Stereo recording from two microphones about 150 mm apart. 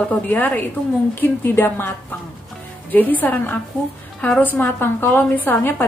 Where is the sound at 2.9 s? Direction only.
10° left (ahead or behind).